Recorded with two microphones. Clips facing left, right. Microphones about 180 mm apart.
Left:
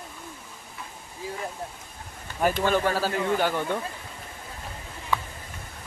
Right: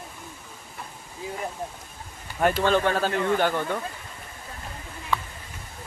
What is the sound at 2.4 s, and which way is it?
Speech, 10° left (ahead or behind).